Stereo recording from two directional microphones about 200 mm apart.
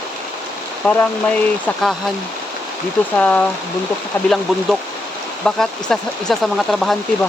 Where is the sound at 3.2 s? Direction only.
10° left (ahead or behind).